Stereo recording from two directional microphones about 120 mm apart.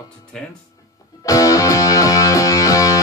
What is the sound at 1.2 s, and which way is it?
Music, 30° left (ahead or behind).